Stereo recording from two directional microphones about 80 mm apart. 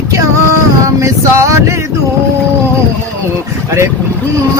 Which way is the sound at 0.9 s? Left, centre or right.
Right.